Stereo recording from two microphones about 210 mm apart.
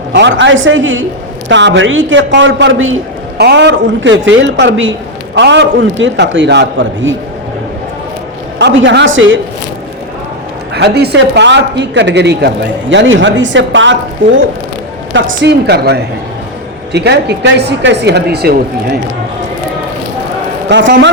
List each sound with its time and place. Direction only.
0.1 s a man's voice: 60° right (ahead or behind)
3.4 s a man's voice: 55° right (ahead or behind)
8.5 s a man's voice: 55° right (ahead or behind)
10.8 s a man's voice: 50° right (ahead or behind)
15.1 s a woman's voice: 60° right (ahead or behind)
20.7 s a man's voice: 55° right (ahead or behind)